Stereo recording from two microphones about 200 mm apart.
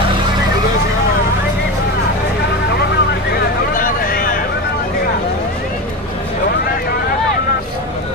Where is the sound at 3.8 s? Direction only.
45° left (ahead or behind).